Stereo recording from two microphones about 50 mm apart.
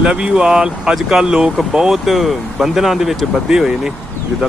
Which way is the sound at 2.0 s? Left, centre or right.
Centre.